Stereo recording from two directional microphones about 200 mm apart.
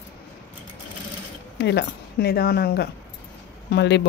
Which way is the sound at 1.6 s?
60° left (ahead or behind).